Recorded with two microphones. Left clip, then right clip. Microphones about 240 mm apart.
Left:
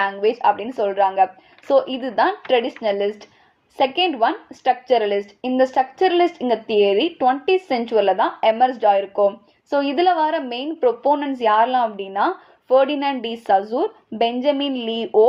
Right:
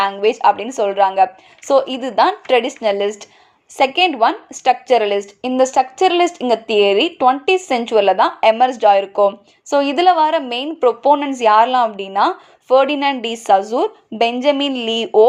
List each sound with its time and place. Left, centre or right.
0.0 s a woman's voice: right